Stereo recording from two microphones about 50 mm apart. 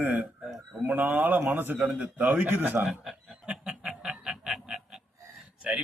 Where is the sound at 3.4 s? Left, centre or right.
Centre.